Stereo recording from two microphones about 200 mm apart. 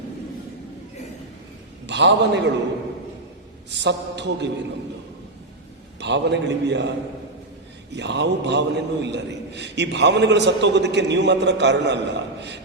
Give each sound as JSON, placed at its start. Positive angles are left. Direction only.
{"t": 1.9, "sound": "a man's voice", "side_deg": -60}
{"t": 3.7, "sound": "a man's voice", "side_deg": -60}
{"t": 6.0, "sound": "a man's voice", "side_deg": -60}
{"t": 7.9, "sound": "a man's voice", "side_deg": -60}